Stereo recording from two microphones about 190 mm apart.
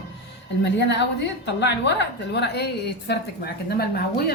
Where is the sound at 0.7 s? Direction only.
65° left (ahead or behind).